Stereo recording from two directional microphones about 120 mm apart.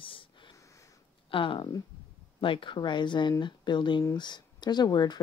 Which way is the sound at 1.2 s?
45° left (ahead or behind).